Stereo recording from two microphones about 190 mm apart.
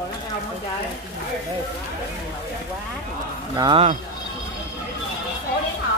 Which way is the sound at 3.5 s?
20° right (ahead or behind).